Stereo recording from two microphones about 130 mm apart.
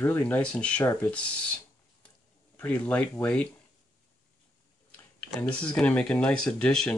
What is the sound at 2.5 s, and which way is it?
Speech, 10° left (ahead or behind).